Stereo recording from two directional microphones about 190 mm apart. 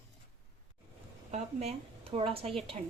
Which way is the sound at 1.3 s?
35° right (ahead or behind).